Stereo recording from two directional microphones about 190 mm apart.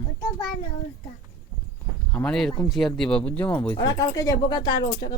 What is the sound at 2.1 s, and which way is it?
Speech, 5° left (ahead or behind).